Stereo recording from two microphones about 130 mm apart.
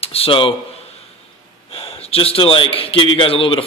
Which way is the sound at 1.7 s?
45° left (ahead or behind).